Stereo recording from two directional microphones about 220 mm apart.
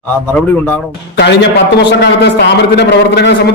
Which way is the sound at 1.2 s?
50° left (ahead or behind).